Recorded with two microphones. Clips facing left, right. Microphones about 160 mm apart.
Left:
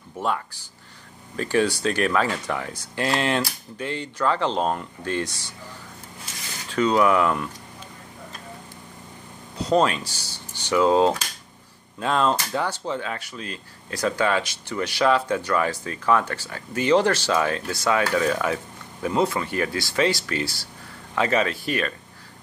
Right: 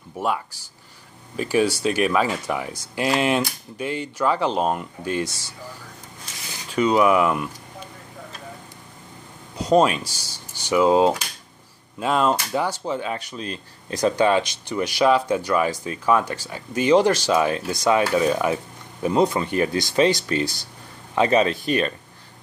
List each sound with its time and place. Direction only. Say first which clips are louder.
0.2 s speech: right 1 dB; 10° right (ahead or behind)
6.7 s speech: right 2 dB; 15° right (ahead or behind)
9.6 s speech: right 3 dB; 10° right (ahead or behind)